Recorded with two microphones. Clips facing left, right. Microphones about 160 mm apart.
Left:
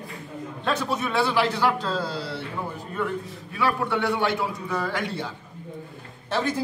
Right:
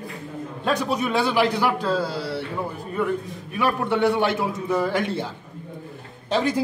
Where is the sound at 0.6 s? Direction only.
15° right (ahead or behind).